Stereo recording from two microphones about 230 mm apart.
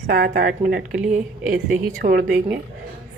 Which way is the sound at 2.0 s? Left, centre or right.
Right.